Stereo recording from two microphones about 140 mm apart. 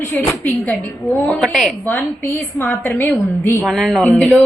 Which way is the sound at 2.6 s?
15° left (ahead or behind).